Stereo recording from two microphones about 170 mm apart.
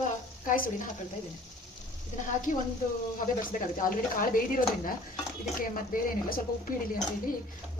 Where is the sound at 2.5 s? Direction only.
50° left (ahead or behind).